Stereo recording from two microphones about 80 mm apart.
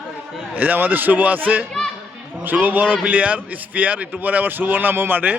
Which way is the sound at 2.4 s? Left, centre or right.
Right.